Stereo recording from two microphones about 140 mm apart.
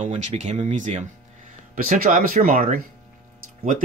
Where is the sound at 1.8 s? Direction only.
80° right.